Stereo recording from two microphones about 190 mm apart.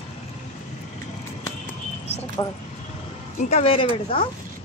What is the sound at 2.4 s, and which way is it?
Speech, 20° left (ahead or behind).